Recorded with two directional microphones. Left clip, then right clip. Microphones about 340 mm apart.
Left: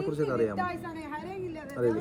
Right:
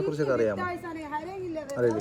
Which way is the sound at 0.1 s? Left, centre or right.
Centre.